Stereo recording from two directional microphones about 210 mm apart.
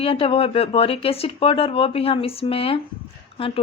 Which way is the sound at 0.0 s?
25° left (ahead or behind).